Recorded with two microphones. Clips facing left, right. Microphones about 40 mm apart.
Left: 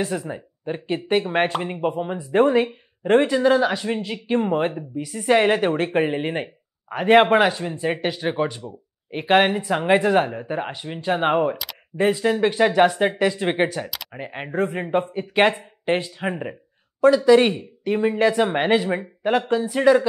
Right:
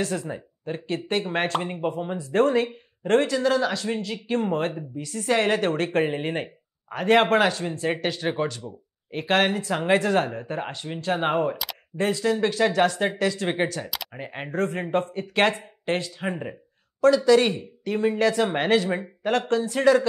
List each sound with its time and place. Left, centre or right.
0.0 s speech: centre
14.1 s speech: centre